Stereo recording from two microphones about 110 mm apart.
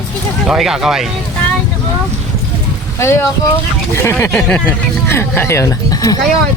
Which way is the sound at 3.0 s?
25° left (ahead or behind).